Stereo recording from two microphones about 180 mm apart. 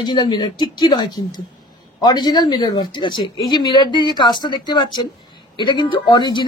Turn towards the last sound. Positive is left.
turn(degrees=25)  # may be behind; listen again after turning